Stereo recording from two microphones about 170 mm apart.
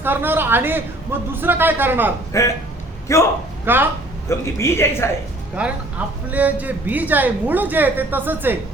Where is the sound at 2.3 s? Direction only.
20° left (ahead or behind).